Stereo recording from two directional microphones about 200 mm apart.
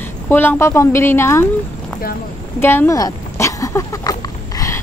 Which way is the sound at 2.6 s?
10° left (ahead or behind).